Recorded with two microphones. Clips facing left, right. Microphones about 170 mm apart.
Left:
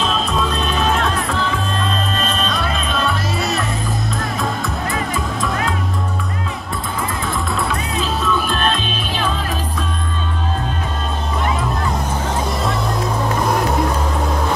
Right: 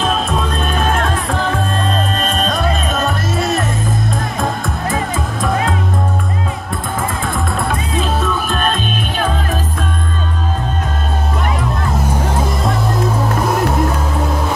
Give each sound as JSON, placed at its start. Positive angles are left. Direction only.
{"t": 0.0, "sound": "music", "side_deg": -50}
{"t": 7.0, "sound": "music", "side_deg": -50}